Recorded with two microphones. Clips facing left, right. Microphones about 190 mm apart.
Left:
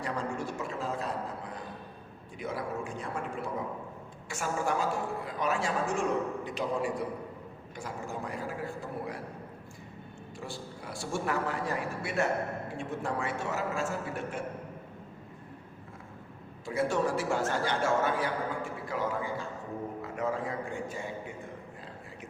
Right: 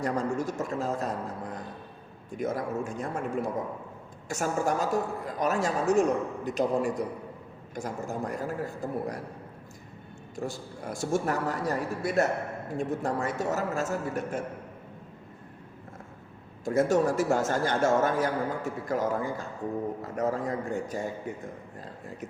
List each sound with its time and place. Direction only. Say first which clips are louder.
0.0 s a man's voice: right 5 dB; 45° right (ahead or behind)
10.3 s a man's voice: right 6 dB; 45° right (ahead or behind)
16.6 s a man's voice: right 5 dB; 45° right (ahead or behind)